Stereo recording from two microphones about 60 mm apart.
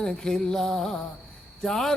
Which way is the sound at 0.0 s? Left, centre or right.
Centre.